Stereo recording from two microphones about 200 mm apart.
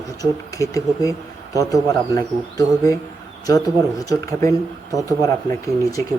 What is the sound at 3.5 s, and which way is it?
Speech, 15° left (ahead or behind).